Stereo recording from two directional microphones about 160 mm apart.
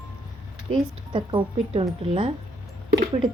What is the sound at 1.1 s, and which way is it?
Speech, 30° right (ahead or behind).